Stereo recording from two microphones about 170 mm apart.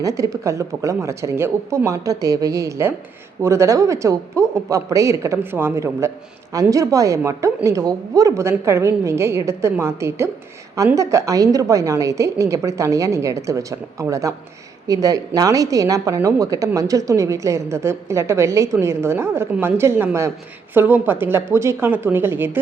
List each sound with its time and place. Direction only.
0.0 s a woman's voice: 20° right (ahead or behind)